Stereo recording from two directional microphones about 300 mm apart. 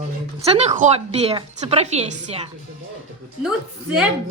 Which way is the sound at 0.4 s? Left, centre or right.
Right.